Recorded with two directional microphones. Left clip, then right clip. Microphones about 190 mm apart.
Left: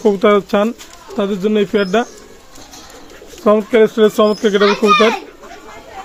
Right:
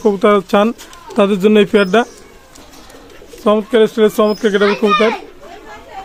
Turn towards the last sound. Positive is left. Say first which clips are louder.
# left 1 dB
turn(degrees=0)  # may be behind; listen again after turning